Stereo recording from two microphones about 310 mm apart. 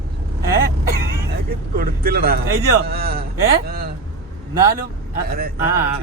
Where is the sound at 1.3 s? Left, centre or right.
Right.